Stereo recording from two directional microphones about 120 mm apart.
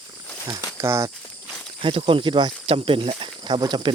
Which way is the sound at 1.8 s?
45° right (ahead or behind).